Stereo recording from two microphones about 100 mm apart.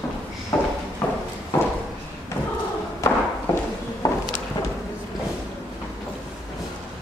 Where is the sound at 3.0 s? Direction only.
30° left (ahead or behind).